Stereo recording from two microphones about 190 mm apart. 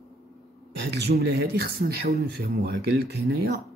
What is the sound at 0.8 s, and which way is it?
Speech, 60° right (ahead or behind).